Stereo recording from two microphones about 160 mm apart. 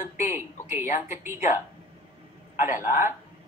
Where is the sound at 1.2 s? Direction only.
15° right (ahead or behind).